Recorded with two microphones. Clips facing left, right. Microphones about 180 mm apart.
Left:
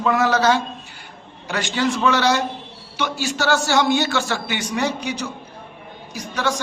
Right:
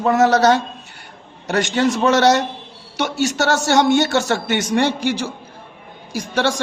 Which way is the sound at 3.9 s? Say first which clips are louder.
Right 4 dB; 60° right (ahead or behind).